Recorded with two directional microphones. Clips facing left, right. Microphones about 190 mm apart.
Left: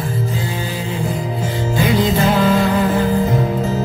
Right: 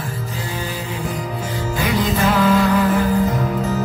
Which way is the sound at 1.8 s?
30° left (ahead or behind).